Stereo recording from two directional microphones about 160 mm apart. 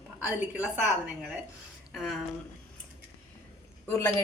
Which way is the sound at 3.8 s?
15° left (ahead or behind).